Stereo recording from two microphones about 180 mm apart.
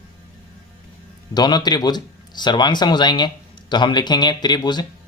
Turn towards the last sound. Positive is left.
turn(degrees=25)  # may be behind; listen again after turning